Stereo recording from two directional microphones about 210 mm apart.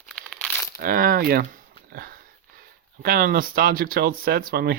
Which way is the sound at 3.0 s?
45° right (ahead or behind).